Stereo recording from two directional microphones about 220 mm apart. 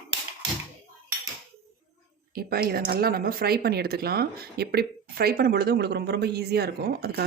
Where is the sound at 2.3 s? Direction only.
45° right (ahead or behind).